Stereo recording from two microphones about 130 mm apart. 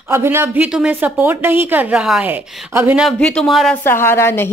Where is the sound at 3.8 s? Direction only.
20° left (ahead or behind).